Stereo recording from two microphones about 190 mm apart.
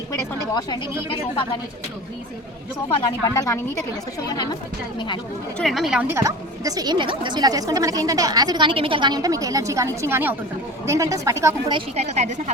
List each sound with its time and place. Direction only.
0.1 s speech: 20° left (ahead or behind)
2.9 s a woman's voice: 20° left (ahead or behind)
4.9 s speech: 25° left (ahead or behind)
5.5 s a woman's voice: centre (ahead or behind); by 11.8 s 15° right (ahead or behind)
11.9 s a woman's voice: 35° right (ahead or behind)